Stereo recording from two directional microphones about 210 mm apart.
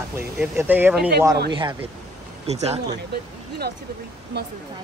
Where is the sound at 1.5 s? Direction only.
25° right (ahead or behind).